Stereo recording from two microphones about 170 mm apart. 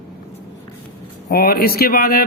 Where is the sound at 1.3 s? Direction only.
65° left (ahead or behind).